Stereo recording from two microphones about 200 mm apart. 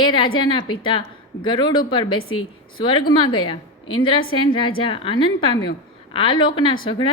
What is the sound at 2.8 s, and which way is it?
Speech, 25° left (ahead or behind).